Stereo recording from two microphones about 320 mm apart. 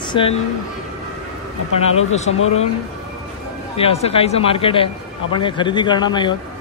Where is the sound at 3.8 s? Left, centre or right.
Centre.